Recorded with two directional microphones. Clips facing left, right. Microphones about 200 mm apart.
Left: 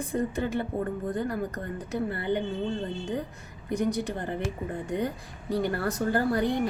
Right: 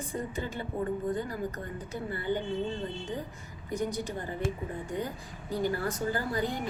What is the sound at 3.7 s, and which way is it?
Speech, 65° left (ahead or behind).